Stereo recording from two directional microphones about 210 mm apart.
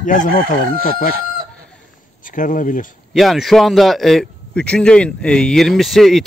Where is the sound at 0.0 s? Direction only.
40° left (ahead or behind).